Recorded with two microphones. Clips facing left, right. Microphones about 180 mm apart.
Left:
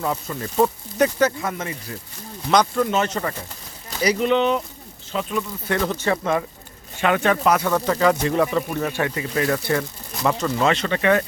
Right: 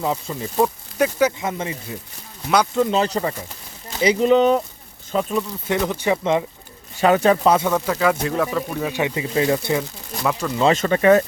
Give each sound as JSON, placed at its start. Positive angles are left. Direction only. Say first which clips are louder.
{"t": 0.0, "sound": "speech", "louder": "right 2 dB", "side_deg": -15}
{"t": 1.4, "sound": "speech", "louder": "right 2 dB", "side_deg": -25}
{"t": 5.6, "sound": "speech", "louder": "right 1 dB", "side_deg": -15}
{"t": 7.0, "sound": "speech", "louder": "right 4 dB", "side_deg": -35}
{"t": 7.7, "sound": "speech", "louder": "left 1 dB", "side_deg": -5}
{"t": 8.9, "sound": "speech", "louder": "right 2 dB", "side_deg": -15}
{"t": 10.4, "sound": "speech", "louder": "left 1 dB", "side_deg": 0}
{"t": 10.8, "sound": "speech", "louder": "right 5 dB", "side_deg": -40}